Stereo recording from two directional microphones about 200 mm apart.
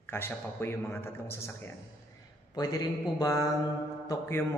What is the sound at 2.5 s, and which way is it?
A man's voice, 20° left (ahead or behind).